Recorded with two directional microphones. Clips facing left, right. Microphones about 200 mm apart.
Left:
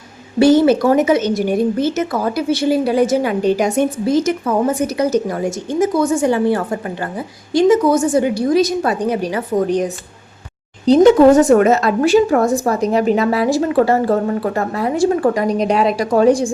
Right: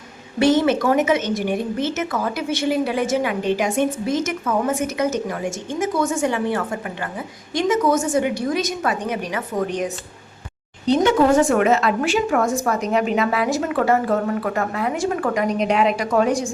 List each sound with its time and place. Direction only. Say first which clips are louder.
0.3 s a woman's voice: left 6 dB; 30° left (ahead or behind)